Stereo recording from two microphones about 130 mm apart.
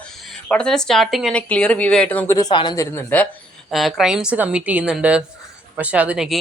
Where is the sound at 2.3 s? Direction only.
35° left (ahead or behind).